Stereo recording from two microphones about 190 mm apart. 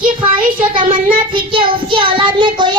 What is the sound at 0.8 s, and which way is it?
A child's voice, 25° right (ahead or behind).